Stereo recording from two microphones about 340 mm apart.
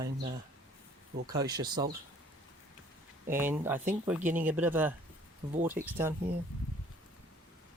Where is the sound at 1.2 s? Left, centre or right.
Centre.